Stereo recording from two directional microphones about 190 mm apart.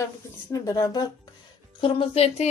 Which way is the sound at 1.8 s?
30° left (ahead or behind).